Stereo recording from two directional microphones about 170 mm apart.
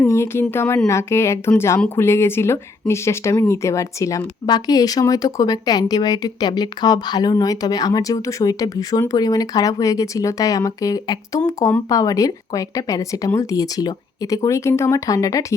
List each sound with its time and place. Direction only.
0.0 s speech: 15° left (ahead or behind)